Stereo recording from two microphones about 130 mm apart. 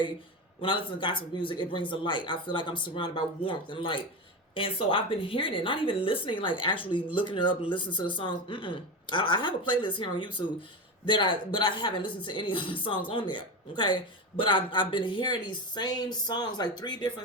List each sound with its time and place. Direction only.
0.6 s a woman's voice: 40° left (ahead or behind)